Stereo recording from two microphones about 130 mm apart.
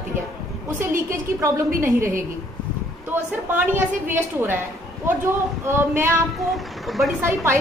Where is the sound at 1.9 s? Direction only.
90° right.